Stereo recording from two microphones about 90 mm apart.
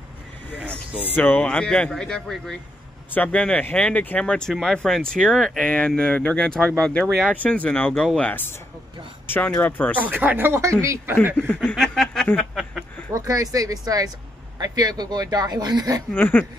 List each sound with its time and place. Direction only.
1.0 s speech: 20° left (ahead or behind)
1.4 s speech: 10° left (ahead or behind)
3.1 s speech: 15° left (ahead or behind)
7.9 s speech: 5° left (ahead or behind)
8.2 s speech: 20° left (ahead or behind)
9.6 s speech: 20° left (ahead or behind)
9.9 s speech: 20° right (ahead or behind)
11.3 s speech: 10° left (ahead or behind)
11.7 s snicker: 5° left (ahead or behind)
12.4 s a sound: 5° right (ahead or behind)
13.1 s speech: 40° right (ahead or behind)
16.1 s speech: 20° left (ahead or behind)